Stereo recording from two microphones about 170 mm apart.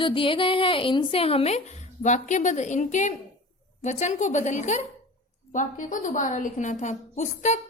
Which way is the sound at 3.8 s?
45° left (ahead or behind).